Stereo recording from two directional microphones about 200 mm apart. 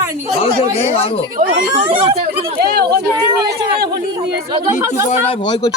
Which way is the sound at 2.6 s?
55° right (ahead or behind).